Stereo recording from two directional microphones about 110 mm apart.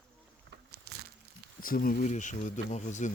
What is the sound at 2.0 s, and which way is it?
Speech, 90° left.